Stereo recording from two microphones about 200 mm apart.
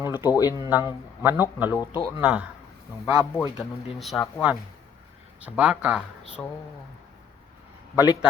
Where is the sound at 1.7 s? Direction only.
20° left (ahead or behind).